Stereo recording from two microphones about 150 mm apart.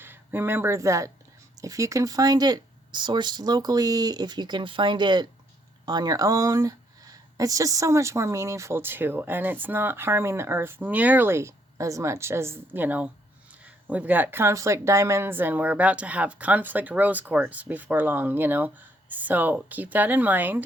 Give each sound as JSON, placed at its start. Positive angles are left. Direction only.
{"t": 0.0, "sound": "speech", "side_deg": -15}